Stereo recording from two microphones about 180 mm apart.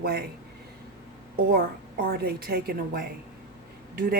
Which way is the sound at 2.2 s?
55° right (ahead or behind).